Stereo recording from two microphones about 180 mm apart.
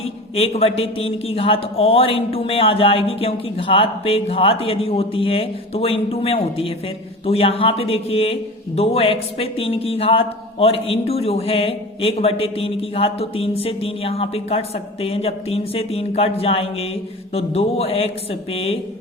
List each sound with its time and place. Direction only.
0.0 s speech: 35° left (ahead or behind)